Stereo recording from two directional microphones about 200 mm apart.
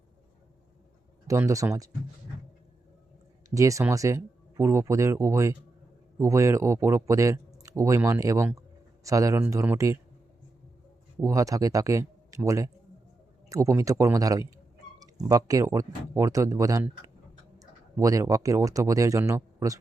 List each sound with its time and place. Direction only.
1.3 s speech: 15° right (ahead or behind)
3.5 s speech: 15° right (ahead or behind)
11.2 s speech: 15° right (ahead or behind)